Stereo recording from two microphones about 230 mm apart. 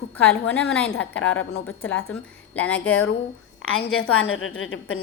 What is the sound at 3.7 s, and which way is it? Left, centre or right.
A woman's voice, left.